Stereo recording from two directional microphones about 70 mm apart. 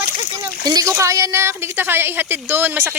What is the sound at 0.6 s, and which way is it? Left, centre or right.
Speech, right.